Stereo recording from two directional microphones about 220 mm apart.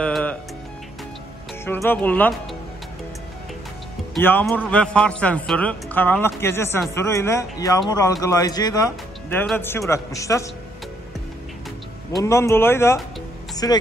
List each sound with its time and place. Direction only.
0.0 s music: 5° left (ahead or behind)
1.6 s speech: 10° left (ahead or behind)
4.1 s speech: 10° left (ahead or behind)
12.2 s speech: 15° left (ahead or behind)